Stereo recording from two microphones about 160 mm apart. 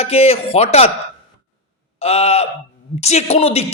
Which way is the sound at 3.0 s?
45° left (ahead or behind).